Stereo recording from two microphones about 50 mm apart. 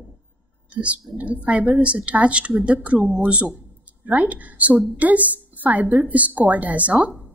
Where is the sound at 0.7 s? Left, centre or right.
Right.